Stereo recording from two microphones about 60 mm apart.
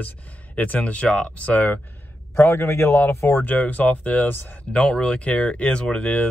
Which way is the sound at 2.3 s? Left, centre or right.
Left.